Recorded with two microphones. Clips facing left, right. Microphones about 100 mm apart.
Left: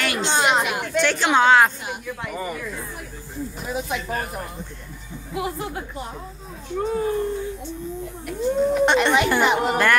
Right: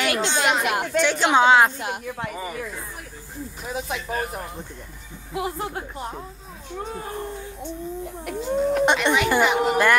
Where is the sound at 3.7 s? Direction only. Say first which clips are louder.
Left 1 dB; 25° right (ahead or behind).